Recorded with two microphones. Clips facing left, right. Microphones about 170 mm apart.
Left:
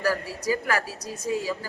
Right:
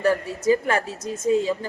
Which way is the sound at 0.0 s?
25° right (ahead or behind).